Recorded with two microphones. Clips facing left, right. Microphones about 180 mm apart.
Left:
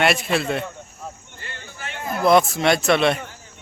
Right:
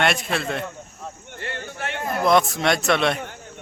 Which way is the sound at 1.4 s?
65° right (ahead or behind).